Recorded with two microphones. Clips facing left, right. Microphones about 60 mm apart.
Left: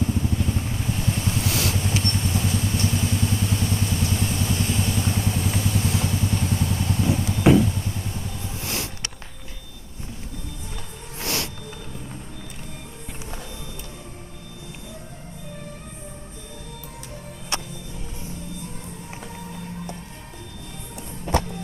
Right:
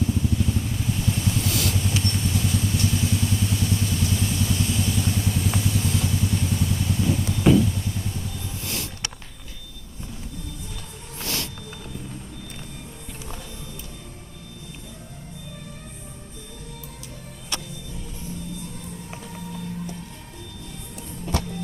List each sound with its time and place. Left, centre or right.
0.0 s vehicle: left
8.6 s a sound: left
11.2 s music: left
17.5 s music: left